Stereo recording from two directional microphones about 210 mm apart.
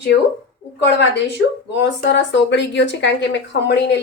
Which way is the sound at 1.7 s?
55° left (ahead or behind).